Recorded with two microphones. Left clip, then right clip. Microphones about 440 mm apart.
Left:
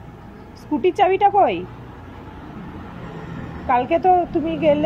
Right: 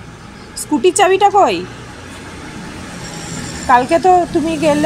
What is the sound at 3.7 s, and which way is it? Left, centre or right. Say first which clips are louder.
Speech: right 6 dB; left.